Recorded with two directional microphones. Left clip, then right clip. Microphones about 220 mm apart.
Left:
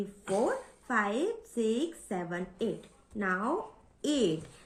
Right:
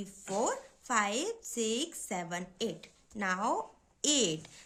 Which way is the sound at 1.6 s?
40° right (ahead or behind).